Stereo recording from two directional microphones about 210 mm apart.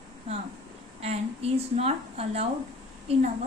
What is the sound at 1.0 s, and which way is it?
A woman's voice, 30° right (ahead or behind).